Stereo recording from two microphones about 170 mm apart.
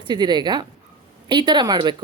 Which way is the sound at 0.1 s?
25° right (ahead or behind).